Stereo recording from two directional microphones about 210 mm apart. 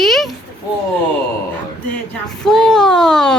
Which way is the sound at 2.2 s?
Centre (ahead or behind).